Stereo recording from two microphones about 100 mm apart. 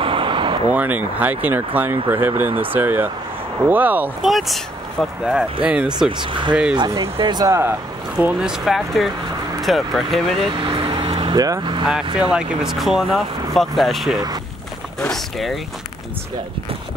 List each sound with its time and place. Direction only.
0.0 s vehicle: 60° right (ahead or behind)
0.7 s speech: 15° right (ahead or behind)
4.2 s speech: centre (ahead or behind)
6.1 s speech: 50° right (ahead or behind)
6.5 s speech: 10° right (ahead or behind)
7.2 s speech: 50° right (ahead or behind)
7.4 s speech: 30° right (ahead or behind)
8.2 s speech: 5° right (ahead or behind)
10.5 s vehicle: 65° right (ahead or behind)
11.3 s speech: 35° right (ahead or behind)
11.9 s speech: 10° right (ahead or behind)